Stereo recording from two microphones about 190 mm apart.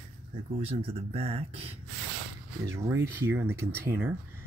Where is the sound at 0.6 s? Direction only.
30° right (ahead or behind).